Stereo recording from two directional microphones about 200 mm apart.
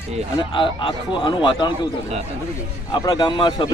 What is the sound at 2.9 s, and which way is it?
Speech, 20° left (ahead or behind).